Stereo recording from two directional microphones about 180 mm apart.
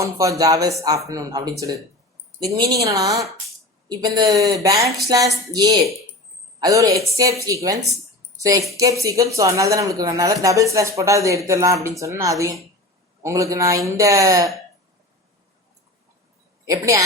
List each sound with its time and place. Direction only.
0.0 s speech: 20° right (ahead or behind)
16.6 s speech: 15° right (ahead or behind)